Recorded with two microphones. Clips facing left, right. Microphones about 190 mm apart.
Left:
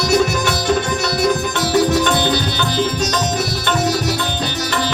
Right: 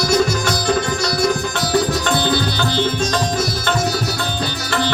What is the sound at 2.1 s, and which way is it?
Music, 20° left (ahead or behind).